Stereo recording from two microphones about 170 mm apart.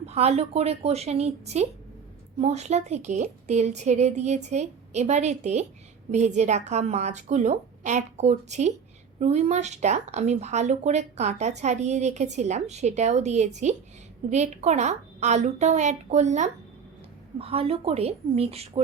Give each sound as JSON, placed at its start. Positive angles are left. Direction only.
{"t": 0.0, "sound": "a woman's voice", "side_deg": -40}